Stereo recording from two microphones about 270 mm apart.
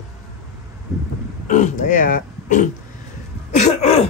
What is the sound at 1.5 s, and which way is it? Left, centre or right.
Speech, left.